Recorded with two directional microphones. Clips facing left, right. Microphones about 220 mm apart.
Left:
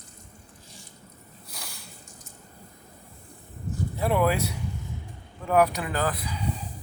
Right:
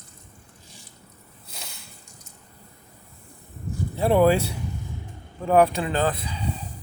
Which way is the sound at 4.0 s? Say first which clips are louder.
Right 6 dB; 30° right (ahead or behind).